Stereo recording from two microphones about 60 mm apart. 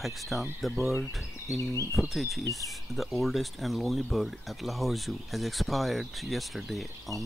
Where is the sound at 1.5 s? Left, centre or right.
Left.